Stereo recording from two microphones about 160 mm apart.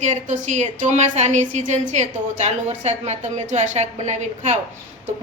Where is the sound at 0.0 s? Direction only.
50° right (ahead or behind).